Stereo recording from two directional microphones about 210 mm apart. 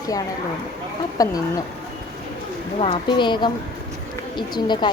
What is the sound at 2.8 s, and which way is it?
Speech, 25° left (ahead or behind).